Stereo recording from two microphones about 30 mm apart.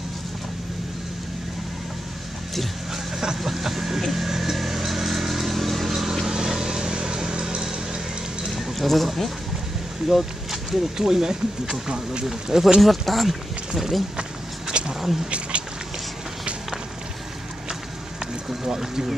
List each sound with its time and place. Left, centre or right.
2.9 s vehicle: centre
5.9 s vehicle: centre
8.5 s speech: centre
10.0 s a sound: centre
11.0 s speech: centre
12.3 s speech: centre
12.8 s speech: centre
14.7 s a sound: right
18.5 s speech: centre